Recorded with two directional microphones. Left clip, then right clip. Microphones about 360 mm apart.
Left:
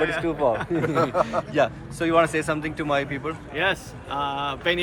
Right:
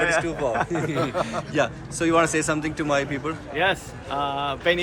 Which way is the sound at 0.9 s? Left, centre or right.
Left.